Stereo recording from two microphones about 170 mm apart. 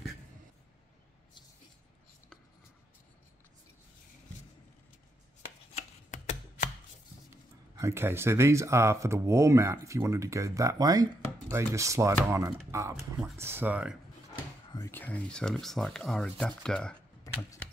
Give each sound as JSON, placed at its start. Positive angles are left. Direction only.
{"t": 6.0, "sound": "a sound", "side_deg": 45}
{"t": 7.7, "sound": "speech", "side_deg": -15}
{"t": 14.7, "sound": "speech", "side_deg": 15}
{"t": 17.2, "sound": "computer keyboard", "side_deg": 20}